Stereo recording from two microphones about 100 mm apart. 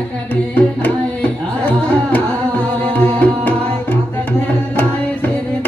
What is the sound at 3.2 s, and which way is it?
Music, 20° left (ahead or behind).